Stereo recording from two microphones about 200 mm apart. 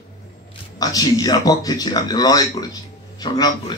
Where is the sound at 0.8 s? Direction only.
20° left (ahead or behind).